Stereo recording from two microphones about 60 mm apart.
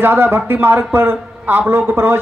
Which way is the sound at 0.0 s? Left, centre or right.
Right.